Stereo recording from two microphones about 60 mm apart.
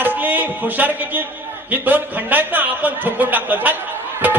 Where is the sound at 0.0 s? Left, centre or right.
Right.